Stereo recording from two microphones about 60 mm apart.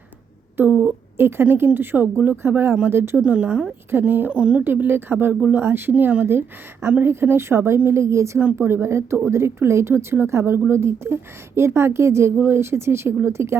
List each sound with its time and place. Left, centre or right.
0.7 s speech: right
1.1 s speech: right
3.2 s speech: right
4.6 s speech: right
7.0 s a woman's voice: right